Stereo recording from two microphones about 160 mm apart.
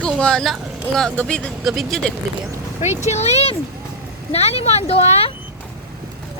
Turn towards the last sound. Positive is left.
turn(degrees=40)  # may be behind; listen again after turning